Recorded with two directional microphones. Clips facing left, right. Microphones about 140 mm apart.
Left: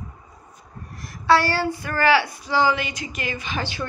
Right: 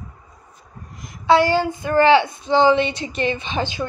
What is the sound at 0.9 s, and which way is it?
A woman's voice, 20° right (ahead or behind).